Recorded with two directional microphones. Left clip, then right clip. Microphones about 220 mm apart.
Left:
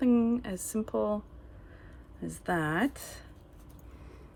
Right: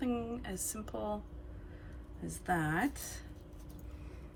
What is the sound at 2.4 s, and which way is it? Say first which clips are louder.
Speech: left 4 dB; 30° left (ahead or behind).